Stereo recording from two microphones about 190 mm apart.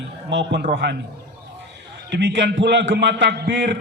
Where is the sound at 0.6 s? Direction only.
60° right (ahead or behind).